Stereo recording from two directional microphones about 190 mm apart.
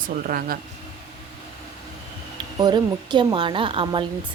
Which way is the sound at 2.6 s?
25° right (ahead or behind).